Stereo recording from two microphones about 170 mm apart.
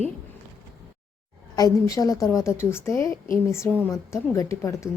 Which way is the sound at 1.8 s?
20° left (ahead or behind).